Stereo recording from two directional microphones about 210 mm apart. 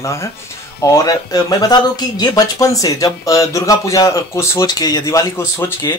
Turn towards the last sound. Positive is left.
turn(degrees=15)  # may be behind; listen again after turning